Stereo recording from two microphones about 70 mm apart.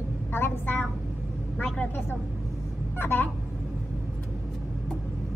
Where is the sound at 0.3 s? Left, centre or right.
Left.